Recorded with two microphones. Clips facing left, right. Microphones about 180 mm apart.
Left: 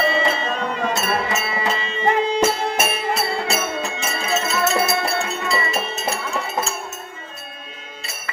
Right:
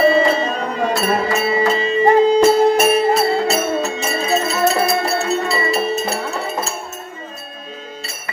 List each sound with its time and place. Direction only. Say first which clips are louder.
0.0 s music: right 7 dB; 35° right (ahead or behind)